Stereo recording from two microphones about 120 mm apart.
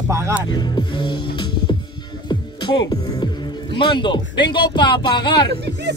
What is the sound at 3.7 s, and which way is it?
Speech, 40° left (ahead or behind).